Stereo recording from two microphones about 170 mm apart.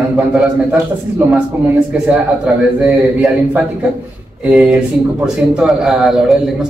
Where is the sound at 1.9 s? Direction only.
5° right (ahead or behind).